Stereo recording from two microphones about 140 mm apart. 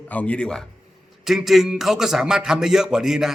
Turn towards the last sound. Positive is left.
turn(degrees=-5)  # may be behind; listen again after turning